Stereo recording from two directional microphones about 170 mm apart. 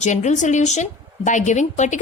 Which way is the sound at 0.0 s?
45° left (ahead or behind).